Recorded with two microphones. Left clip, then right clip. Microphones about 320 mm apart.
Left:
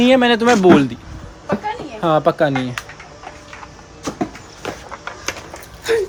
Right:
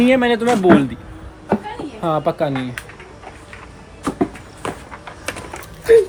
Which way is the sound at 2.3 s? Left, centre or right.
Centre.